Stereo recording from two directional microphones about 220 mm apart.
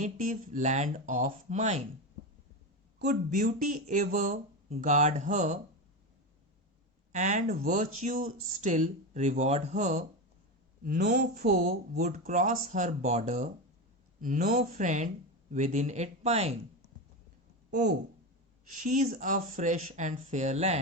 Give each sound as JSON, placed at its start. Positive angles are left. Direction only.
{"t": 0.0, "sound": "speech", "side_deg": -35}
{"t": 3.1, "sound": "speech", "side_deg": -35}
{"t": 7.1, "sound": "speech", "side_deg": -35}
{"t": 18.8, "sound": "speech", "side_deg": -35}